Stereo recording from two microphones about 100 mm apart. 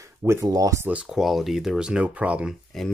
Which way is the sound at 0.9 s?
10° right (ahead or behind).